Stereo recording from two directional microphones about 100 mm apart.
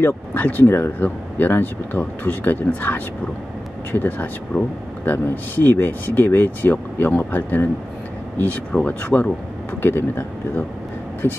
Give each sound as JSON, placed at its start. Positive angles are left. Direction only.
{"t": 0.0, "sound": "speech", "side_deg": 20}